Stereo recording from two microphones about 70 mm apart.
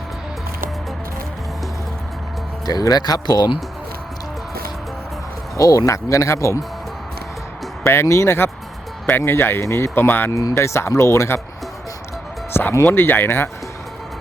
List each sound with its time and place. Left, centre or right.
2.6 s speech: left
5.5 s speech: left
7.9 s speech: left
10.3 s speech: left
12.5 s speech: left